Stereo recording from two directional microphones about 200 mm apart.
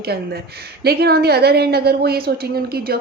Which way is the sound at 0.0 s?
50° right (ahead or behind).